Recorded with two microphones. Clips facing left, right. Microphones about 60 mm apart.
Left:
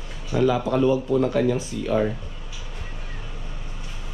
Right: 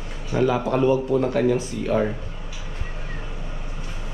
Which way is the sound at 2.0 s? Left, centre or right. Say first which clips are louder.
Even; right.